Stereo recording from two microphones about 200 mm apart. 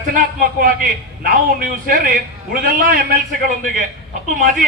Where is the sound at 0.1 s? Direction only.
45° right (ahead or behind).